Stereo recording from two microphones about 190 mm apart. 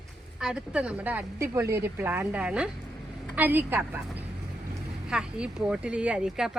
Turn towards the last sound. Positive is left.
turn(degrees=-5)  # may be behind; listen again after turning